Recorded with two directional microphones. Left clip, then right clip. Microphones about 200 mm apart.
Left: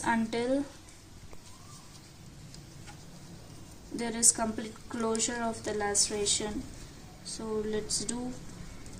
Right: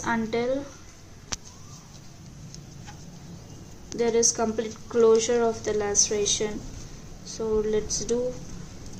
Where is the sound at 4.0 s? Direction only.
40° left (ahead or behind).